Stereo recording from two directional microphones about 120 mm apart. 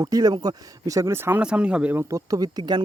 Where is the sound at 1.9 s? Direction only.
30° right (ahead or behind).